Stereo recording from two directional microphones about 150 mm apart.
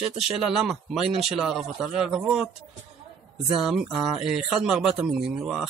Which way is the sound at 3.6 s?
5° right (ahead or behind).